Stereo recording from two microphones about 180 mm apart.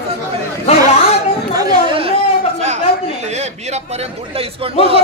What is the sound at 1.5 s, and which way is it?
Chatter, 25° right (ahead or behind).